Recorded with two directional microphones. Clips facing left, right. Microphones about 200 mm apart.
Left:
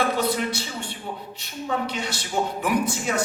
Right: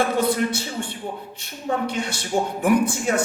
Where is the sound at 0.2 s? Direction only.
50° right (ahead or behind).